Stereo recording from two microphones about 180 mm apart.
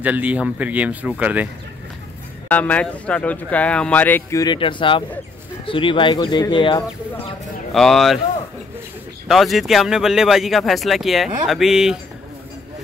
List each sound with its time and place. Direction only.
0.0 s speech: 10° right (ahead or behind)
2.4 s speech: 10° left (ahead or behind); by 6.8 s 25° left (ahead or behind)
7.7 s speech: centre (ahead or behind)
9.3 s speech: centre (ahead or behind)